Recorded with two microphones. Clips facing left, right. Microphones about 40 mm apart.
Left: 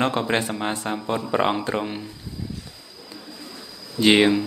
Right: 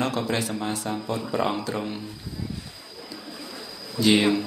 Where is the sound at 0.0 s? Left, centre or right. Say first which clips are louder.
Left 4 dB; left.